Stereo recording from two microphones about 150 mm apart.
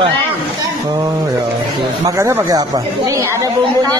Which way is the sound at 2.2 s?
20° right (ahead or behind).